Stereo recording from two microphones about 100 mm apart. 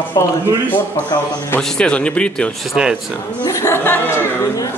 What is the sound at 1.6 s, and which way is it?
Speech, 5° left (ahead or behind).